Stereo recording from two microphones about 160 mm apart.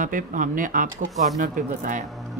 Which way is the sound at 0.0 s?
55° right (ahead or behind).